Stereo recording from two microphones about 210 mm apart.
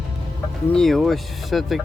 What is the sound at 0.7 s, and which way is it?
Speech, centre (ahead or behind).